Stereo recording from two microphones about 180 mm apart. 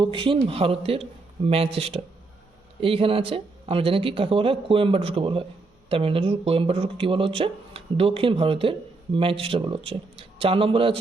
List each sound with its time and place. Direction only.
0.0 s speech: 30° right (ahead or behind)